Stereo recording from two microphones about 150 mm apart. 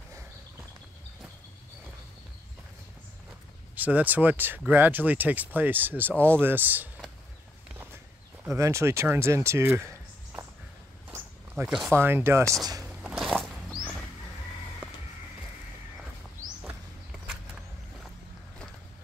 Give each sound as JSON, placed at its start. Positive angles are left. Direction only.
{"t": 3.7, "sound": "speech", "side_deg": -10}
{"t": 6.1, "sound": "speech", "side_deg": 10}
{"t": 6.4, "sound": "speech", "side_deg": -10}
{"t": 8.5, "sound": "speech", "side_deg": -20}
{"t": 11.1, "sound": "walk", "side_deg": -15}
{"t": 11.9, "sound": "speech", "side_deg": -15}
{"t": 13.0, "sound": "a sound", "side_deg": 0}